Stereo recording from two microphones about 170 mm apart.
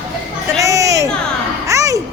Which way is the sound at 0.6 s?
20° right (ahead or behind).